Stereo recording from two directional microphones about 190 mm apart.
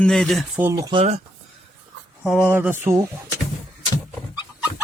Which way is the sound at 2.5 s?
10° right (ahead or behind).